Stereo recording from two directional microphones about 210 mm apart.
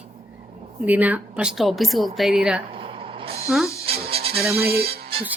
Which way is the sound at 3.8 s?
25° right (ahead or behind).